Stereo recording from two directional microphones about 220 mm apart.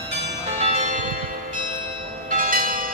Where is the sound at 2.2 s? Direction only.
40° right (ahead or behind).